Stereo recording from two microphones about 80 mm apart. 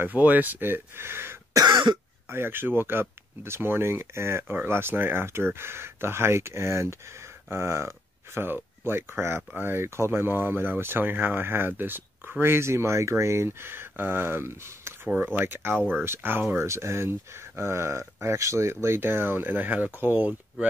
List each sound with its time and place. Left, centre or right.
0.0 s speech: right
1.7 s cough: right
2.2 s speech: right